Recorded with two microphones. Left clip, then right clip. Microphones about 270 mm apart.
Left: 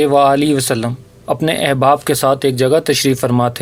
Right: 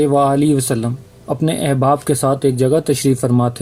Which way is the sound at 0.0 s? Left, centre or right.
Left.